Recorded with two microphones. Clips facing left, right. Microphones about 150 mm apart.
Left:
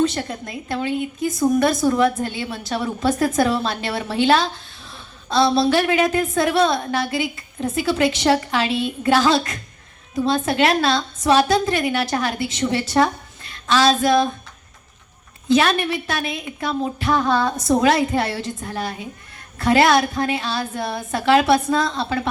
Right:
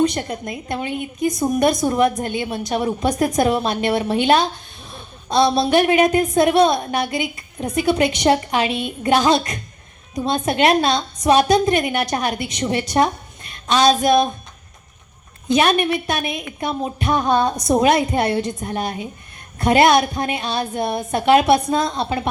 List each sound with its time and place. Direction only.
0.0 s a woman's voice: 15° right (ahead or behind)
15.4 s a woman's voice: 20° right (ahead or behind)